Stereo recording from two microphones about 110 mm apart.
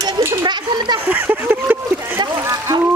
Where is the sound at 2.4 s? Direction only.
30° right (ahead or behind).